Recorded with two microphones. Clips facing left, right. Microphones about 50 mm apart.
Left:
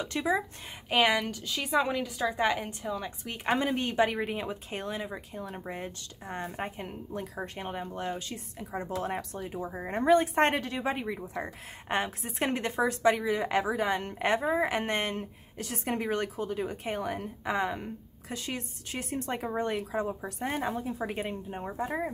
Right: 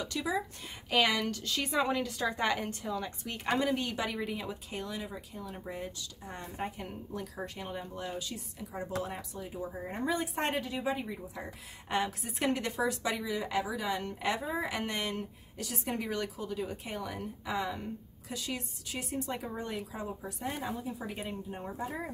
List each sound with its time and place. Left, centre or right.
0.0 s a woman's voice: left
0.8 s a woman's voice: left
3.4 s a woman's voice: left
9.0 s speech: left
11.9 s a woman's voice: left